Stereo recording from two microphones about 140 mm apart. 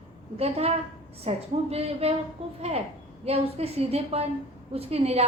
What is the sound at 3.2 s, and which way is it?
A woman's voice, 45° right (ahead or behind).